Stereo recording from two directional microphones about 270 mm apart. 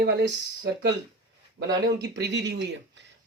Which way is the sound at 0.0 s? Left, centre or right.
Right.